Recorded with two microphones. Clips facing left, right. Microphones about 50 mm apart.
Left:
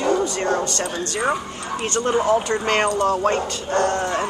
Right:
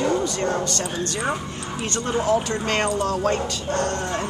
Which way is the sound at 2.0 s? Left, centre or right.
Left.